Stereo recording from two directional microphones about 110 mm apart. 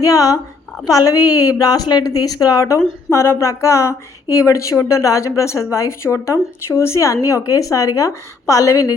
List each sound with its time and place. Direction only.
0.0 s a woman's voice: 30° left (ahead or behind)